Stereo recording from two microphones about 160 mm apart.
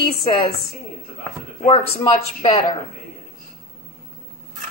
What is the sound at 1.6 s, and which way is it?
Speech, 35° left (ahead or behind).